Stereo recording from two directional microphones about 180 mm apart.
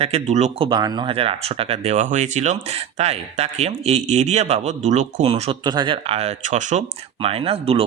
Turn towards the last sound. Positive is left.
turn(degrees=-35)  # may be behind; listen again after turning